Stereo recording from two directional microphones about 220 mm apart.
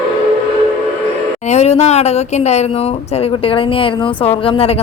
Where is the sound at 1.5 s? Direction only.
30° left (ahead or behind).